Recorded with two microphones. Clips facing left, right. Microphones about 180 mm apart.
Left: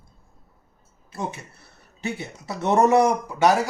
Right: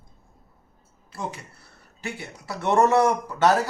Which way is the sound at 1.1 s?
25° left (ahead or behind).